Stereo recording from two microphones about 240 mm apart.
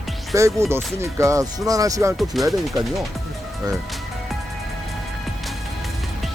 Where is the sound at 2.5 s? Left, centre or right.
Centre.